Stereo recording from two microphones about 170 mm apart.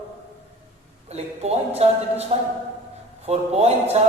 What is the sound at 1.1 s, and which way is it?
A man's voice, 40° right (ahead or behind).